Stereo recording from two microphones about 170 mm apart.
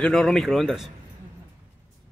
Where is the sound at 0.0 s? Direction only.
Centre (ahead or behind).